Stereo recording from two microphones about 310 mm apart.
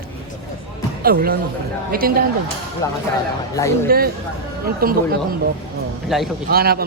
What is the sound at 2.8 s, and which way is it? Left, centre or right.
Speech, centre.